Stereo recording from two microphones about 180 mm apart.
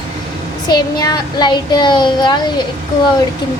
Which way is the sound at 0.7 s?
20° left (ahead or behind).